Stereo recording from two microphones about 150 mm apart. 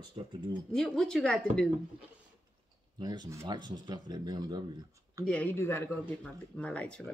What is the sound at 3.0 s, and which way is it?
Speech, 25° right (ahead or behind).